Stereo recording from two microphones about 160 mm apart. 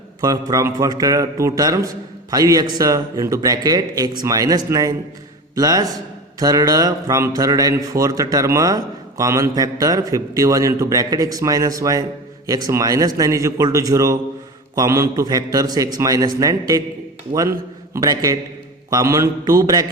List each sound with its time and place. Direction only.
0.2 s a man's voice: 20° right (ahead or behind)
17.9 s a man's voice: 20° right (ahead or behind)